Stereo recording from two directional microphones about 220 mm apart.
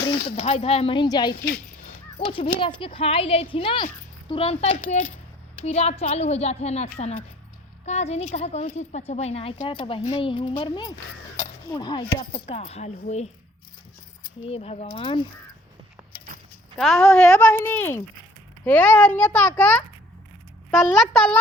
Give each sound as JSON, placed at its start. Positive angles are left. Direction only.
{"t": 0.3, "sound": "a woman's voice", "side_deg": 25}
{"t": 14.4, "sound": "a woman's voice", "side_deg": 25}
{"t": 16.7, "sound": "a child's voice", "side_deg": 0}